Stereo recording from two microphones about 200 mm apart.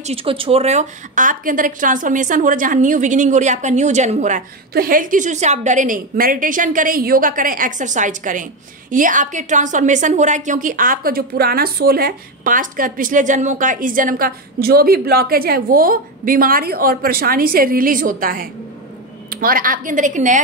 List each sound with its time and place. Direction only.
0.0 s a woman's voice: 30° right (ahead or behind)